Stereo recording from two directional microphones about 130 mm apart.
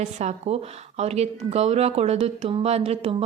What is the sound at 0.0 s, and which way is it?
A woman's voice, 60° right (ahead or behind).